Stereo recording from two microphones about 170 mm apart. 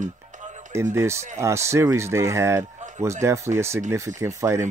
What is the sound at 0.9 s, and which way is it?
Speech, 15° right (ahead or behind).